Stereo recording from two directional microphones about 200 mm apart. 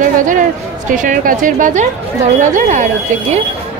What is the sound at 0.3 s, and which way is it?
A woman's voice, 40° right (ahead or behind).